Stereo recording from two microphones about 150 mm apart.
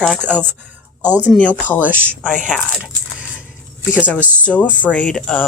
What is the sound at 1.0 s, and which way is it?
Speech, 10° right (ahead or behind).